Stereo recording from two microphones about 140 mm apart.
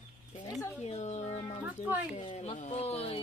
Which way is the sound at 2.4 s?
50° left (ahead or behind).